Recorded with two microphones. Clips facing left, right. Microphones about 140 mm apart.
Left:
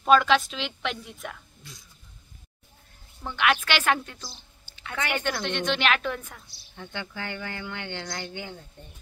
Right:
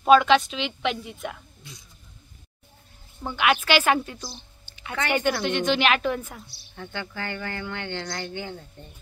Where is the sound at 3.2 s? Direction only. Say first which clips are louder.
Right 2 dB; 5° right (ahead or behind).